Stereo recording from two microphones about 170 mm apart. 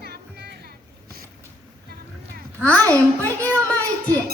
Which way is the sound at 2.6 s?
10° left (ahead or behind).